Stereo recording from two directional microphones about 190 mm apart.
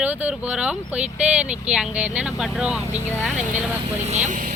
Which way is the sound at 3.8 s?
35° right (ahead or behind).